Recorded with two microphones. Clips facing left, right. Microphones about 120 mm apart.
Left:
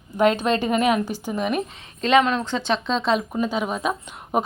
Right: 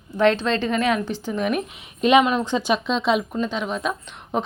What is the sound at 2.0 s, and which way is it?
Speech, 15° right (ahead or behind).